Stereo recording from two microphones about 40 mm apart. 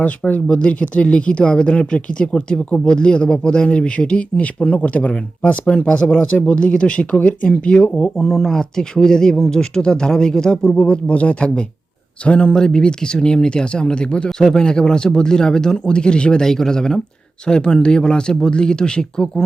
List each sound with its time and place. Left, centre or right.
0.0 s speech: left
0.4 s speech: left
8.3 s speech: centre
10.8 s speech: left
12.5 s speech: centre
16.5 s speech: centre